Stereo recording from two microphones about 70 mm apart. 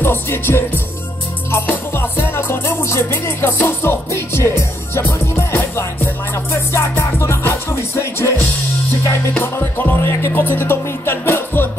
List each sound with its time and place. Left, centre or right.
0.0 s music: left
2.2 s music: left
6.3 s music: left
9.4 s music: left